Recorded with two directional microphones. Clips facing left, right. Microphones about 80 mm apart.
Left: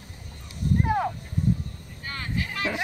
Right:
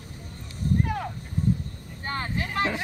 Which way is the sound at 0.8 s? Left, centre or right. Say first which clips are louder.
Left 6 dB; left.